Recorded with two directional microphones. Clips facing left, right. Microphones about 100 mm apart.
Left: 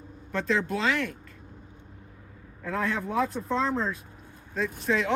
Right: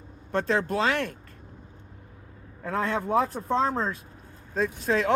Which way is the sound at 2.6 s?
40° right (ahead or behind).